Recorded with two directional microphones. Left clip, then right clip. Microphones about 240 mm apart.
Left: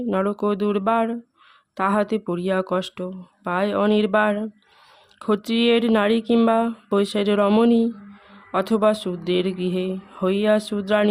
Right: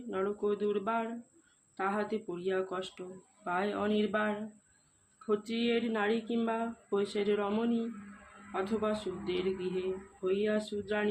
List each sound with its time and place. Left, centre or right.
0.1 s speech: left